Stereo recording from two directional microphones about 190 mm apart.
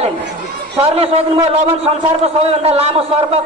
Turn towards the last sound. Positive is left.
turn(degrees=-30)  # may be behind; listen again after turning